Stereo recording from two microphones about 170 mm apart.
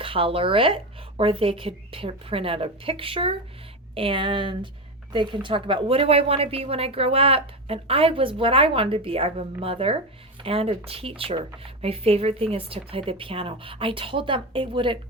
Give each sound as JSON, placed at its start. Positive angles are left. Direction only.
{"t": 0.0, "sound": "a woman's voice", "side_deg": -30}